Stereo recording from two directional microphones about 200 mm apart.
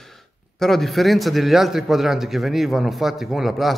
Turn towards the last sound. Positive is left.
turn(degrees=0)  # may be behind; listen again after turning